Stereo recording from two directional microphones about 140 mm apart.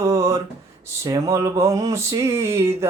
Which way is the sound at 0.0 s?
20° right (ahead or behind).